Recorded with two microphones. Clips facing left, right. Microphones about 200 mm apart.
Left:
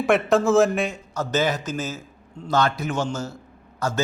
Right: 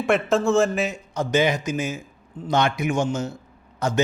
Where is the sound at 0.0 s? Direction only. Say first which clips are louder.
Left 1 dB; centre (ahead or behind).